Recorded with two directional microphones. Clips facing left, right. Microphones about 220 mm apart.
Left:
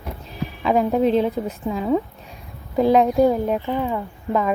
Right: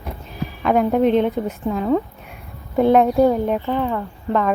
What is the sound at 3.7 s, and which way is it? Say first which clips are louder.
Speech: right 2 dB; 15° left (ahead or behind).